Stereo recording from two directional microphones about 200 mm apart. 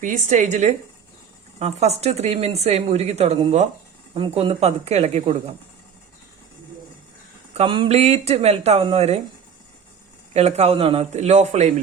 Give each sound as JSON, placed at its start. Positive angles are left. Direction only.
{"t": 0.0, "sound": "speech", "side_deg": -40}
{"t": 7.5, "sound": "speech", "side_deg": -30}
{"t": 10.3, "sound": "speech", "side_deg": -30}